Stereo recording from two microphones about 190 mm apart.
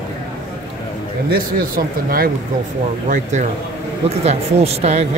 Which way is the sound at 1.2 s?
50° right (ahead or behind).